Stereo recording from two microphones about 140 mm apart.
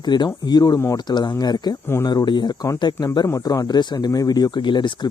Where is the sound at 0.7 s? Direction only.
20° left (ahead or behind).